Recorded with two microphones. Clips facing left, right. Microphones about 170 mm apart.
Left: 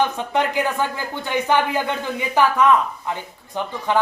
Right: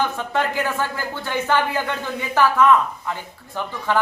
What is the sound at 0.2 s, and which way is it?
A woman's voice, 15° left (ahead or behind).